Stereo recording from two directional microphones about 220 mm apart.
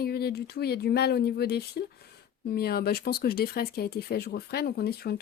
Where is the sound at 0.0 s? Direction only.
45° left (ahead or behind).